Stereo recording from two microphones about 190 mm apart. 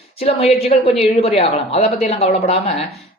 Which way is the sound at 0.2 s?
30° left (ahead or behind).